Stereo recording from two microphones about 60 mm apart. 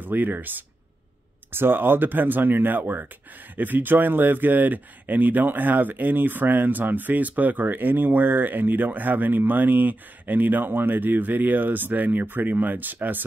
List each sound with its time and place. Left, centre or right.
0.0 s speech: right